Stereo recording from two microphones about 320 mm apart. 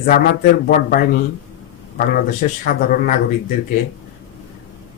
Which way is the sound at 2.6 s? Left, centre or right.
Left.